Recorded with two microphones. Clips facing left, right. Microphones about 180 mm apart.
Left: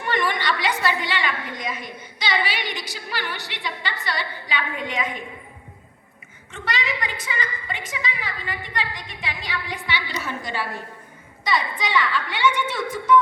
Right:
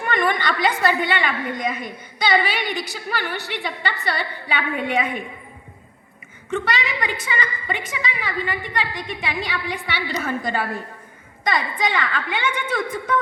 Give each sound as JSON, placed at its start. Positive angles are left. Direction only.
{"t": 0.0, "sound": "a woman's voice", "side_deg": -50}
{"t": 6.5, "sound": "a woman's voice", "side_deg": -60}
{"t": 10.1, "sound": "a woman's voice", "side_deg": -50}